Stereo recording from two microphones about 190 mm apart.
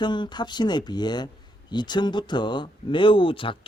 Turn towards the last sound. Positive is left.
turn(degrees=30)  # may be behind; listen again after turning